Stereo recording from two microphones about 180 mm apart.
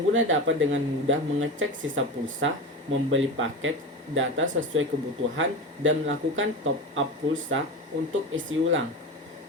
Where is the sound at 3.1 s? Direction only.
90° right.